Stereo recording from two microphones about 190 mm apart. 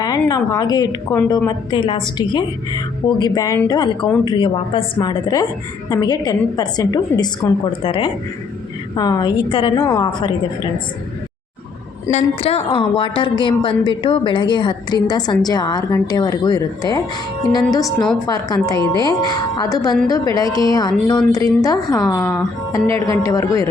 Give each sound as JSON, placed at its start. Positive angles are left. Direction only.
{"t": 0.0, "sound": "a woman's voice", "side_deg": 20}
{"t": 12.1, "sound": "a woman's voice", "side_deg": 30}
{"t": 17.8, "sound": "a woman's voice", "side_deg": 5}
{"t": 18.3, "sound": "a woman's voice", "side_deg": 20}